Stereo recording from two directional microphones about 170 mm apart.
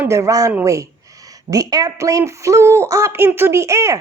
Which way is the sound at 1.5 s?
20° right (ahead or behind).